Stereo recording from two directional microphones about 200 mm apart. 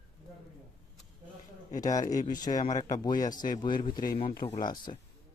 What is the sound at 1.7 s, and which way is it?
Speech, 20° left (ahead or behind).